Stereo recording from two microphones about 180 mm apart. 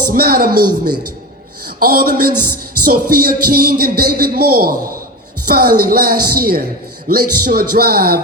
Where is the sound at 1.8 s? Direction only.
55° right (ahead or behind).